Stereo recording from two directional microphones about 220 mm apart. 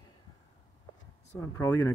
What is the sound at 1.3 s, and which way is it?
Speech, 15° left (ahead or behind).